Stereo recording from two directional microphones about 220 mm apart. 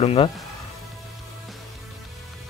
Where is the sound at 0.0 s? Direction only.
25° left (ahead or behind).